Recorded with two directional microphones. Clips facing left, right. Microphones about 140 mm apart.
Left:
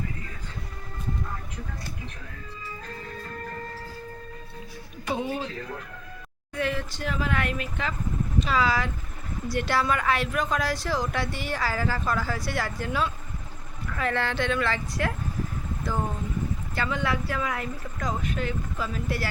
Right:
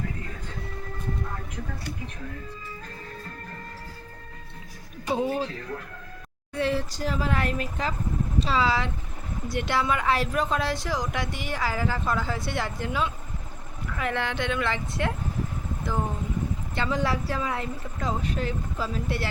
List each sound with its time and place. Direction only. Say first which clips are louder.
5.0 s speech: right 3 dB; 35° right (ahead or behind)
6.5 s a woman's voice: right 3 dB; 30° right (ahead or behind)
10.1 s a woman's voice: right 1 dB; 30° right (ahead or behind)
16.9 s speech: right 2 dB; 35° right (ahead or behind)